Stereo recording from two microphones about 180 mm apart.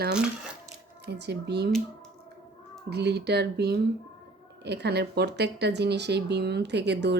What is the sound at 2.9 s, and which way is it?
Speech, 65° right (ahead or behind).